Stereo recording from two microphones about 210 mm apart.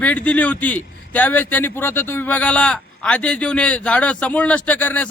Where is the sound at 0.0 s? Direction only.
5° left (ahead or behind).